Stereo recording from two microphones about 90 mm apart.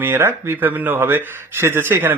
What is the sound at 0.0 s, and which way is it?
Speech, 25° right (ahead or behind).